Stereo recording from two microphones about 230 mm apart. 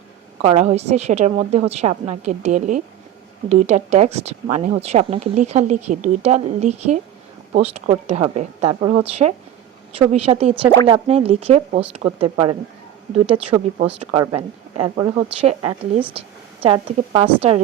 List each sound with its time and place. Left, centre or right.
0.4 s speech: right
16.6 s speech: right